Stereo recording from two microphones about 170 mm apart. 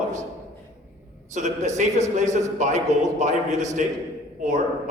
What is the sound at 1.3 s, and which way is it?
A man's voice, 45° right (ahead or behind).